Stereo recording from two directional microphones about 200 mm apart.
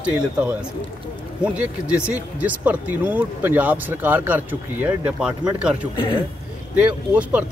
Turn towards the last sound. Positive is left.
turn(degrees=-5)  # may be behind; listen again after turning